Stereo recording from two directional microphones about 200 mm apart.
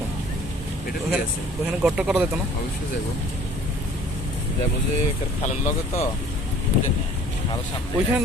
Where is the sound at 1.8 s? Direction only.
5° right (ahead or behind).